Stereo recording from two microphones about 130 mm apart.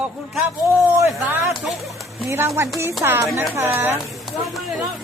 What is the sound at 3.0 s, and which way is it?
Speech, 20° right (ahead or behind).